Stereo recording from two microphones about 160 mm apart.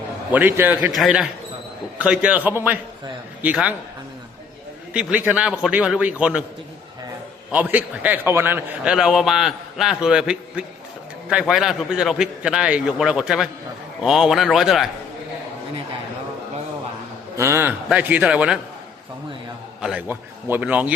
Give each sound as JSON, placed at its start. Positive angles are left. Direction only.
{"t": 0.3, "sound": "a man's voice", "side_deg": -10}
{"t": 0.9, "sound": "a man's voice", "side_deg": 0}
{"t": 4.9, "sound": "a man's voice", "side_deg": -10}
{"t": 7.5, "sound": "a man's voice", "side_deg": -10}
{"t": 17.3, "sound": "a man's voice", "side_deg": -15}
{"t": 19.8, "sound": "a man's voice", "side_deg": -5}